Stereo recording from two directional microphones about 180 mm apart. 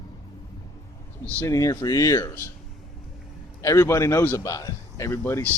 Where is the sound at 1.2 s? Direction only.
10° left (ahead or behind).